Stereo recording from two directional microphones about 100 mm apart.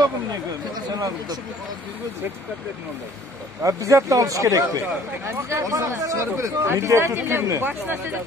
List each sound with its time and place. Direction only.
0.9 s speech: 40° right (ahead or behind)
3.6 s speech: 35° right (ahead or behind)